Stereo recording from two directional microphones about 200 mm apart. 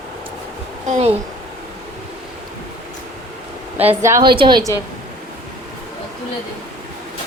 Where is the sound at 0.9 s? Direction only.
30° right (ahead or behind).